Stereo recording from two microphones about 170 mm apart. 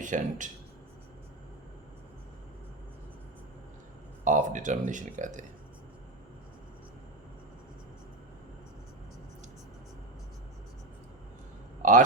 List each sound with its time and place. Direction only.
0.0 s speech: 50° right (ahead or behind)
4.2 s speech: 50° right (ahead or behind)
11.8 s a sound: 50° right (ahead or behind)